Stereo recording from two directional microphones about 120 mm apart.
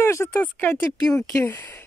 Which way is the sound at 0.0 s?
25° left (ahead or behind).